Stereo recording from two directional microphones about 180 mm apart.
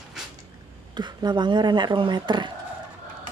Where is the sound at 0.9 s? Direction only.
25° right (ahead or behind).